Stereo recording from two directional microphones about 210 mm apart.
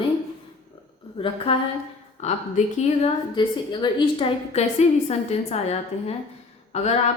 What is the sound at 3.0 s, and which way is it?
A woman's voice, 20° left (ahead or behind).